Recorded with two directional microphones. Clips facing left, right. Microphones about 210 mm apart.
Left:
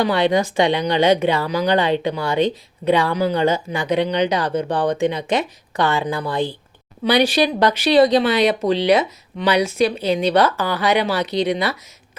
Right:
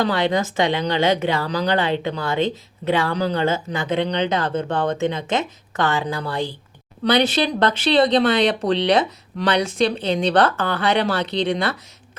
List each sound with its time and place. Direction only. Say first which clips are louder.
0.0 s speech: left 3 dB; 15° left (ahead or behind)